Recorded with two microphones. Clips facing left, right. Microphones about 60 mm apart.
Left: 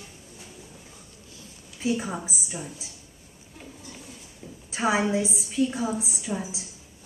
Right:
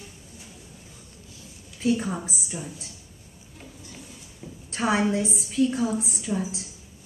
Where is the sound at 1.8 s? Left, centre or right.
Centre.